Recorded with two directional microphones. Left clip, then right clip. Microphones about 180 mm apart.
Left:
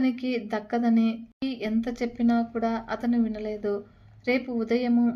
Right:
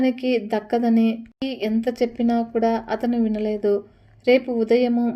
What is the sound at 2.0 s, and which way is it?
Speech, 30° right (ahead or behind).